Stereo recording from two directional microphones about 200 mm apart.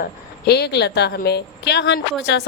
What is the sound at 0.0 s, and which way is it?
A woman's voice, 55° left (ahead or behind).